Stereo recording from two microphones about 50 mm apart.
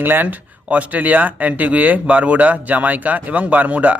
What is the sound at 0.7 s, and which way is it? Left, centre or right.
Speech, right.